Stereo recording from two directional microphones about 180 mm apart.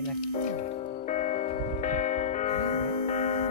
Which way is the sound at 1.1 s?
40° left (ahead or behind).